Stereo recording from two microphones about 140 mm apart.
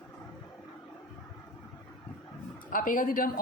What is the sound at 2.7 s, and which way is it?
Speech, 75° left (ahead or behind).